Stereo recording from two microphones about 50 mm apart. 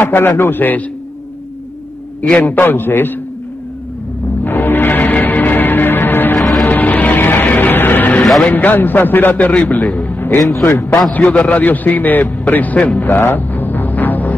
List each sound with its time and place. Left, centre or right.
0.0 s a man's voice: left
2.2 s a man's voice: left
2.5 s a man's voice: left
4.2 s music: left
8.5 s a man's voice: left
13.1 s music: left